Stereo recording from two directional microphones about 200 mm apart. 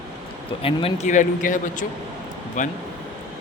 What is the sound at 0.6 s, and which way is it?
Speech, 30° left (ahead or behind).